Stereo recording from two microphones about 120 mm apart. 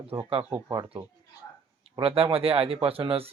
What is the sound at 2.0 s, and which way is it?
Speech, 50° right (ahead or behind).